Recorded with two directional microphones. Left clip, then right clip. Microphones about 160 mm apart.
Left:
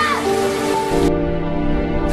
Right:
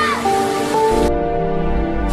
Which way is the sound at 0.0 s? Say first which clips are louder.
Right 1 dB; centre (ahead or behind).